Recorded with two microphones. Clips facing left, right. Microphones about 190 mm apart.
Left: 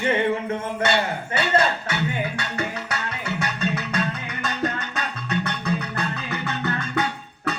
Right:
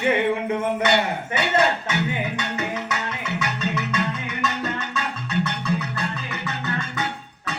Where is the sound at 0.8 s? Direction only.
20° right (ahead or behind).